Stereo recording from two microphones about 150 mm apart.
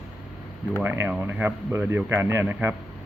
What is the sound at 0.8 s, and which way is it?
Speech, 10° right (ahead or behind).